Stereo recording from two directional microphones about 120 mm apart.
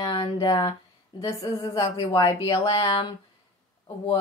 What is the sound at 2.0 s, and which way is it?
Speech, 35° left (ahead or behind).